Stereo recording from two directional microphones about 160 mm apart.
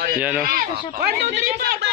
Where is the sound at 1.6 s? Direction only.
80° right.